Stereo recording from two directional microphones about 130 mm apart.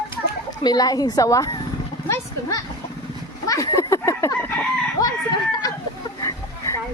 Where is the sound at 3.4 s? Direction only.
25° left (ahead or behind).